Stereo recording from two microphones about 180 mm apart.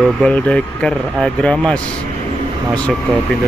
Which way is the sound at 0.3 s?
5° left (ahead or behind).